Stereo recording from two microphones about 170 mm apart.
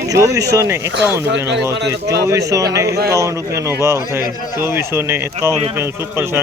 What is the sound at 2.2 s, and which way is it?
Speech, 20° right (ahead or behind).